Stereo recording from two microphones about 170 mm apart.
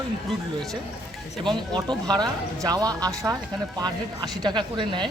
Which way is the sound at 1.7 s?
25° right (ahead or behind).